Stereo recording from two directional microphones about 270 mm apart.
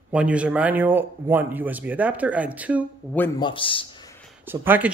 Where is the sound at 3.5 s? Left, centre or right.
Centre.